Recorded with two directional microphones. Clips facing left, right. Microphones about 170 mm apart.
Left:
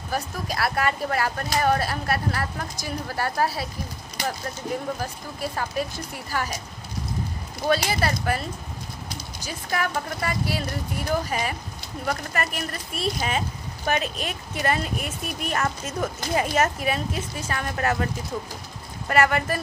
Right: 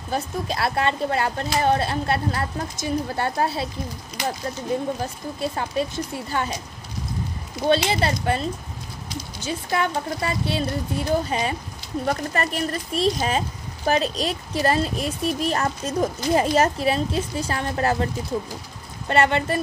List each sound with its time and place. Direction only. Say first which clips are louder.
0.1 s a woman's voice: right 3 dB; 25° right (ahead or behind)
4.7 s a woman's voice: right 4 dB; 25° right (ahead or behind)
7.6 s a woman's voice: right 3 dB; 25° right (ahead or behind)
19.0 s a woman's voice: right 1 dB; 25° right (ahead or behind)